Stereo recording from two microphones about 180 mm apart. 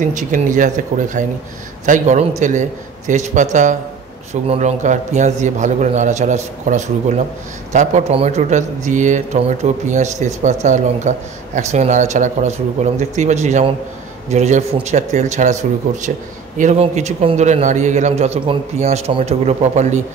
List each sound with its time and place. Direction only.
0.0 s a man's voice: 45° right (ahead or behind)